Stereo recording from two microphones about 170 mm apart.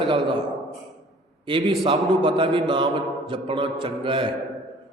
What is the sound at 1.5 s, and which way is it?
A man's voice, 30° right (ahead or behind).